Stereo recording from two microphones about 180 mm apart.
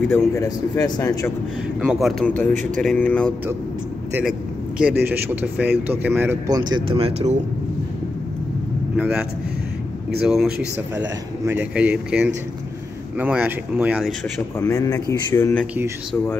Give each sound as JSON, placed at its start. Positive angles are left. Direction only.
{"t": 0.1, "sound": "a man's voice", "side_deg": 20}
{"t": 1.8, "sound": "speech", "side_deg": 0}
{"t": 2.5, "sound": "speech", "side_deg": -45}
{"t": 2.8, "sound": "speech", "side_deg": 5}
{"t": 4.1, "sound": "speech", "side_deg": -5}
{"t": 8.9, "sound": "speech", "side_deg": -10}
{"t": 10.2, "sound": "speech", "side_deg": -5}
{"t": 14.6, "sound": "speech", "side_deg": 20}
{"t": 15.6, "sound": "speech", "side_deg": -10}